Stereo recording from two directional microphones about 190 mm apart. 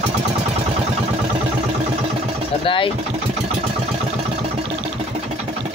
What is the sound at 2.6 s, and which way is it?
Vehicle, 25° left (ahead or behind).